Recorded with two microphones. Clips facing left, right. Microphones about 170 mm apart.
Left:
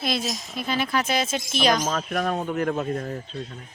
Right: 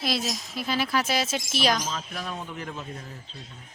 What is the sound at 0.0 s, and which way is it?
Speech, centre (ahead or behind).